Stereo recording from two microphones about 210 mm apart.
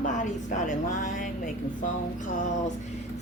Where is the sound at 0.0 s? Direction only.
35° left (ahead or behind).